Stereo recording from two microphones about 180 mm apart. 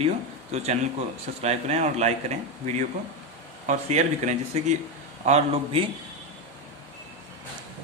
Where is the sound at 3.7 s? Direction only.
40° right (ahead or behind).